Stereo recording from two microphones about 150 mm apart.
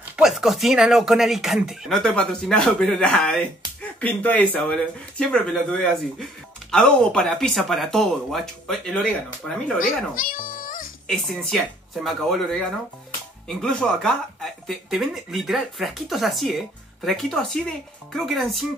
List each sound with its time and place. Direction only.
0.0 s speech: 5° right (ahead or behind)
9.8 s speech: 65° left (ahead or behind)
11.1 s speech: centre (ahead or behind)